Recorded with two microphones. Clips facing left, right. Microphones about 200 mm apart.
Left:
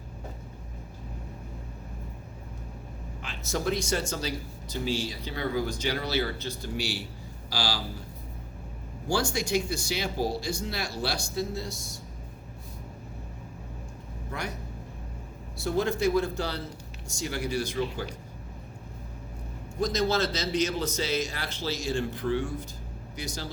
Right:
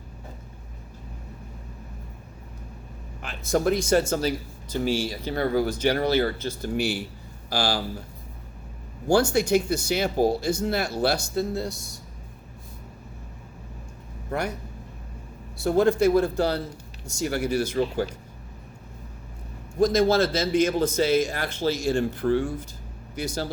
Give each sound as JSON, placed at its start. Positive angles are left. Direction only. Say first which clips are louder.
{"t": 3.2, "sound": "a man's voice", "louder": "right 8 dB", "side_deg": -50}
{"t": 9.5, "sound": "speech", "louder": "right 6 dB", "side_deg": -55}
{"t": 14.3, "sound": "a man's voice", "louder": "right 8 dB", "side_deg": -50}
{"t": 15.6, "sound": "speech", "louder": "right 7 dB", "side_deg": -55}
{"t": 19.8, "sound": "speech", "louder": "right 7 dB", "side_deg": -50}